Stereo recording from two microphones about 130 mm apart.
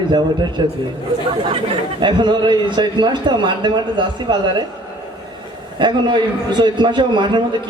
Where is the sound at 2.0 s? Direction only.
35° right (ahead or behind).